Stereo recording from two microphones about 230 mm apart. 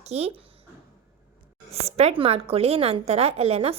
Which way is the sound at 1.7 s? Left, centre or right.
Right.